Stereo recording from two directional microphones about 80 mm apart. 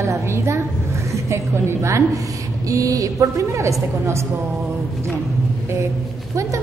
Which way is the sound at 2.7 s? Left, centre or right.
Right.